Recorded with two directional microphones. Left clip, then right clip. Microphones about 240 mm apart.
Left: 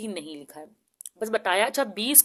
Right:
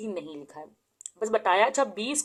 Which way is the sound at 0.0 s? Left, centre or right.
Left.